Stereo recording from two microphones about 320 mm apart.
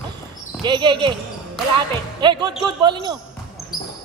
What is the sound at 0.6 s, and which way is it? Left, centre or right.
Speech, centre.